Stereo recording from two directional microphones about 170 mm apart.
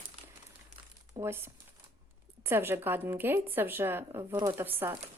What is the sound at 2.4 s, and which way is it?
A woman's voice, 15° right (ahead or behind).